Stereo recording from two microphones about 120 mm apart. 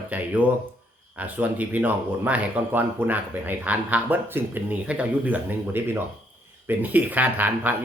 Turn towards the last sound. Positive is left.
turn(degrees=-15)  # may be behind; listen again after turning